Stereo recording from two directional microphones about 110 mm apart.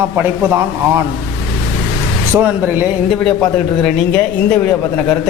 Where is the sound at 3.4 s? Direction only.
10° left (ahead or behind).